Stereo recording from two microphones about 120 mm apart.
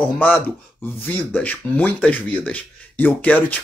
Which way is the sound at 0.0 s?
15° left (ahead or behind).